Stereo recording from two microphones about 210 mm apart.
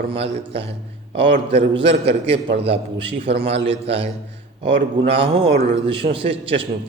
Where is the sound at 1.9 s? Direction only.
25° right (ahead or behind).